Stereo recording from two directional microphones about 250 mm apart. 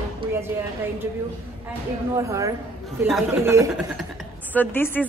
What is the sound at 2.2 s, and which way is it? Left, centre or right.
A woman's voice, centre.